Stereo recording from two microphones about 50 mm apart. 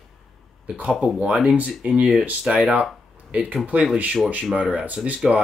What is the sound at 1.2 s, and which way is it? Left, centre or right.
Speech, centre.